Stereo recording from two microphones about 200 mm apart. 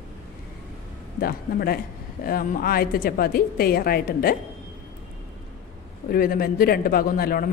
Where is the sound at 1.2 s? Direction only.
50° left (ahead or behind).